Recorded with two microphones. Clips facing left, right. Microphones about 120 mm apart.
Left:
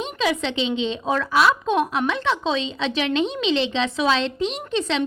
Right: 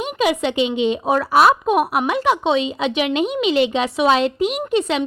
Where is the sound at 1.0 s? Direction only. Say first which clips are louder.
Right 4 dB; 25° right (ahead or behind).